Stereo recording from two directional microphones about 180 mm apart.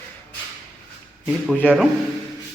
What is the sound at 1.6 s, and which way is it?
Speech, centre (ahead or behind).